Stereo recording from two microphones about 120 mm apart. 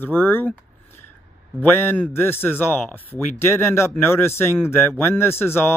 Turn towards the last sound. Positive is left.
turn(degrees=20)  # may be behind; listen again after turning